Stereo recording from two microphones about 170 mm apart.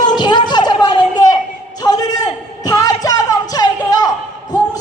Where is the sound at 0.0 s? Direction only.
25° left (ahead or behind).